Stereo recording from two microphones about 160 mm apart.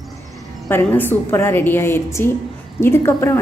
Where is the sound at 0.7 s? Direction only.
15° left (ahead or behind).